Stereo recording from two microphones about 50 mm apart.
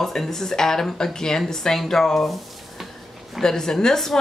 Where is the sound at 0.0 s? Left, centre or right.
Centre.